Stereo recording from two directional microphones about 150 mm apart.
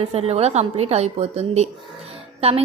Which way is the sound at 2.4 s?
40° right (ahead or behind).